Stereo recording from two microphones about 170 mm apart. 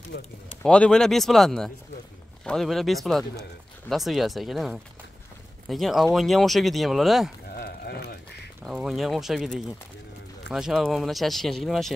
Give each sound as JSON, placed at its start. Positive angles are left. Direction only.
{"t": 0.1, "sound": "speech", "side_deg": 70}
{"t": 0.6, "sound": "speech", "side_deg": 5}
{"t": 7.5, "sound": "a sound", "side_deg": 65}
{"t": 8.6, "sound": "speech", "side_deg": 0}